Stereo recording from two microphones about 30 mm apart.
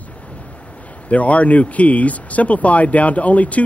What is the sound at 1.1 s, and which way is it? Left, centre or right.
Speech, left.